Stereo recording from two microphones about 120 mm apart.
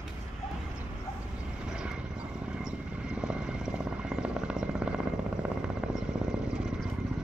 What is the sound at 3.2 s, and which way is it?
Helicopter, 5° right (ahead or behind).